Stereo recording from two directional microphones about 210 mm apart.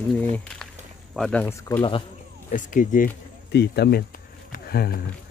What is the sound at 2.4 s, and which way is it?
Speech, 40° left (ahead or behind).